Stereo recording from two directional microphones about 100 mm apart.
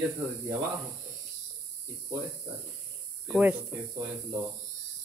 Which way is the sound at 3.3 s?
15° right (ahead or behind).